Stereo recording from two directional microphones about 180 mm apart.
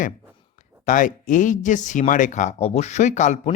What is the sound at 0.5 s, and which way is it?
Speech, 45° left (ahead or behind).